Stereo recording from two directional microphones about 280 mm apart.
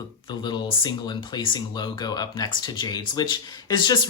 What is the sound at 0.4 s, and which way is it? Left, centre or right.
Speech, centre.